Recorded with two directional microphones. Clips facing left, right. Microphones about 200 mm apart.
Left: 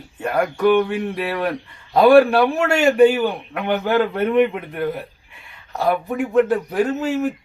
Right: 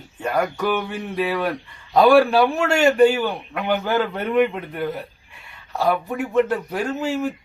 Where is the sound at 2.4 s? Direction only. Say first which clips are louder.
Left 1 dB; 5° left (ahead or behind).